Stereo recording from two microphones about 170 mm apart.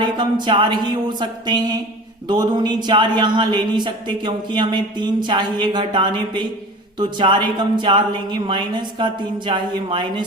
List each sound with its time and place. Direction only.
0.0 s speech: 25° right (ahead or behind)